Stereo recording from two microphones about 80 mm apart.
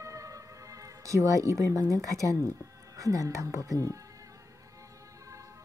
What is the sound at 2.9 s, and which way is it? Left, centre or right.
Speech, right.